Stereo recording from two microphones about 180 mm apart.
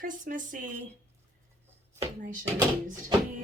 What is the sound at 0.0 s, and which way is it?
Speech, 50° right (ahead or behind).